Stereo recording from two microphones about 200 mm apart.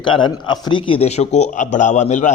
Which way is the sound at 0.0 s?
25° left (ahead or behind).